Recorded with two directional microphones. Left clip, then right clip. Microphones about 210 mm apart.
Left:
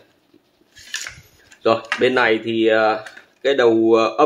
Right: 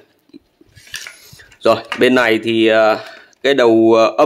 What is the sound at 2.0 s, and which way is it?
Speech, 50° right (ahead or behind).